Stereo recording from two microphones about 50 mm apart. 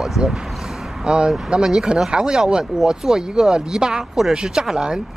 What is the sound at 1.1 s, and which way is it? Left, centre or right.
Speech, centre.